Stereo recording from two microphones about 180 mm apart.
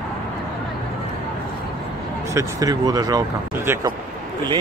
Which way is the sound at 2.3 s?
20° right (ahead or behind).